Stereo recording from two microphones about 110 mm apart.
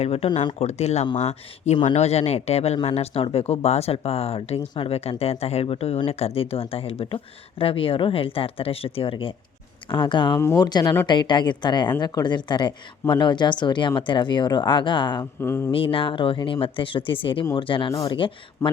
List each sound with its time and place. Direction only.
0.0 s speech: 65° left (ahead or behind)
0.6 s speech: 80° left; by 10.3 s 45° left (ahead or behind)
10.3 s speech: 25° left (ahead or behind)
10.6 s speech: 40° left (ahead or behind)
15.2 s speech: 20° left (ahead or behind)
15.7 s speech: 55° left (ahead or behind)